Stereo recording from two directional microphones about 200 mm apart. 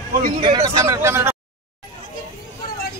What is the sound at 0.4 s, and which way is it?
Speech, 20° right (ahead or behind).